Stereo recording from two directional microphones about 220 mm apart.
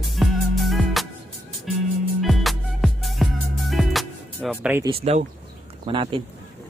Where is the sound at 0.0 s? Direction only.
Centre (ahead or behind).